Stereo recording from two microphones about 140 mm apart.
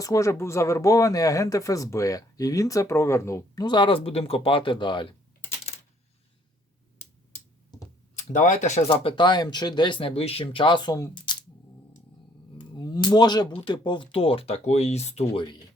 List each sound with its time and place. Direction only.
0.0 s speech: 25° left (ahead or behind)
7.0 s a sound: 15° left (ahead or behind)
8.3 s speech: 65° left (ahead or behind)
8.9 s speech: 35° left (ahead or behind)
12.7 s speech: 30° left (ahead or behind); by 15.2 s 50° left (ahead or behind)